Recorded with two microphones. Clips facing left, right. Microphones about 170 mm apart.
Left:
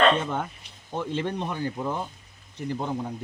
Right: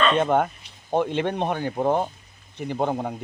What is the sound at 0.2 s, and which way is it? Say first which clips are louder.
Speech: right 9 dB; 60° right (ahead or behind).